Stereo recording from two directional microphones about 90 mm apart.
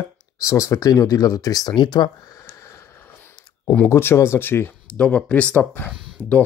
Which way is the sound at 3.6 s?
15° left (ahead or behind).